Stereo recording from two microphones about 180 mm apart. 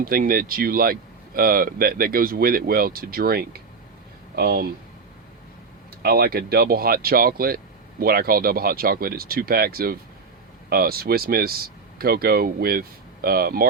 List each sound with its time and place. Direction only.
0.0 s speech: 55° right (ahead or behind)
6.0 s speech: 55° right (ahead or behind)